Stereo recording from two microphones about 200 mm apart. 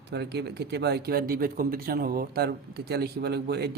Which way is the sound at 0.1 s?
55° right (ahead or behind).